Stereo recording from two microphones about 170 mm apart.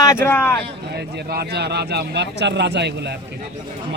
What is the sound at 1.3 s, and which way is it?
Speech, 75° right (ahead or behind).